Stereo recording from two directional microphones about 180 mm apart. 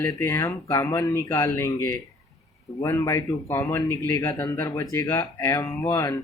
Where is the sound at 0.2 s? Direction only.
20° left (ahead or behind).